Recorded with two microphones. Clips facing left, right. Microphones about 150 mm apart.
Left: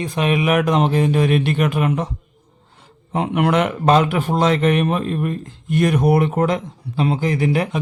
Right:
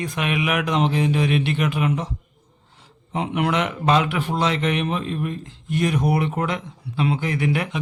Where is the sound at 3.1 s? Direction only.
50° left (ahead or behind).